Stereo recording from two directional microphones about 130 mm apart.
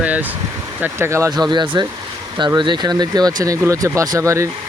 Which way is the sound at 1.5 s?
35° right (ahead or behind).